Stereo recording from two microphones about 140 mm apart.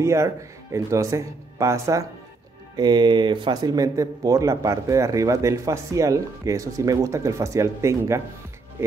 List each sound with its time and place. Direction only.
0.0 s a man's voice: 20° right (ahead or behind)